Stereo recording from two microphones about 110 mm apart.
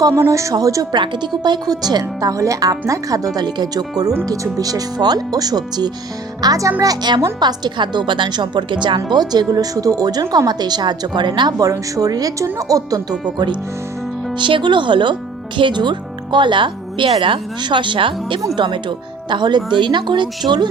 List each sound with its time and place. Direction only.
0.1 s speech: 25° right (ahead or behind)
14.3 s speech: 45° right (ahead or behind)